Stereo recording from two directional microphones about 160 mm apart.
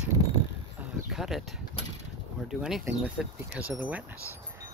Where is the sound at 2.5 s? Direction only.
Centre (ahead or behind).